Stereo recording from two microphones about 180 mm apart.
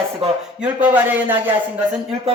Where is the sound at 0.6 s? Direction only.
10° right (ahead or behind).